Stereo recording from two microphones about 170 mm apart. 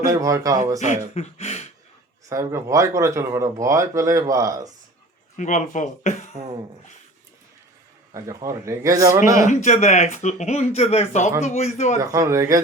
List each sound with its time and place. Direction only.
0.0 s a man's voice: 20° right (ahead or behind)
0.8 s speech: 40° left (ahead or behind)
2.3 s speech: 15° right (ahead or behind)
5.4 s speech: 45° left (ahead or behind)
8.1 s a man's voice: 20° right (ahead or behind)
9.5 s speech: 45° left (ahead or behind)
11.9 s a man's voice: 20° right (ahead or behind)